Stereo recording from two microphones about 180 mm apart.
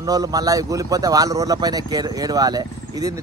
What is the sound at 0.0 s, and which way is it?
Speech, 20° right (ahead or behind).